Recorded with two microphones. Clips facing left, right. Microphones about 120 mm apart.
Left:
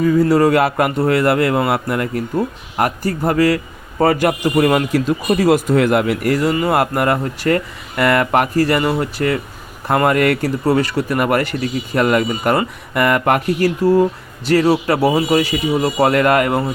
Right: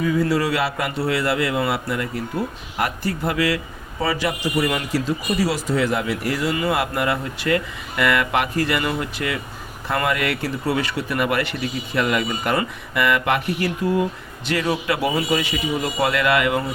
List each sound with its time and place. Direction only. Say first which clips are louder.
0.0 s speech: left 7 dB; 40° left (ahead or behind)